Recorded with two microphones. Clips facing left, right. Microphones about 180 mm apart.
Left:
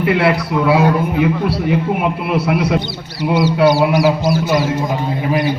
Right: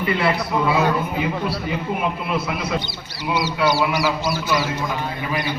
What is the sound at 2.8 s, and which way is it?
A man's voice, 55° left (ahead or behind).